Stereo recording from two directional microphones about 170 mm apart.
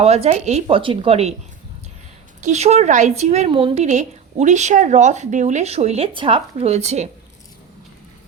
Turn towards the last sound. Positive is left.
turn(degrees=-40)  # may be behind; listen again after turning